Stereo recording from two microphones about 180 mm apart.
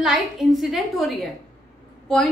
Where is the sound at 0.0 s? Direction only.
Centre (ahead or behind).